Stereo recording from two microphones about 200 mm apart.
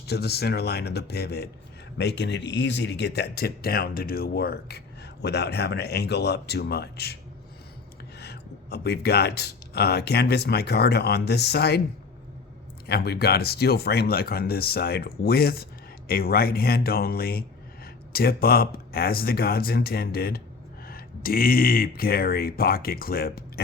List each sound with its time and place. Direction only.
0.1 s speech: 55° left (ahead or behind)
8.2 s speech: 55° left (ahead or behind)
12.9 s speech: 50° left (ahead or behind)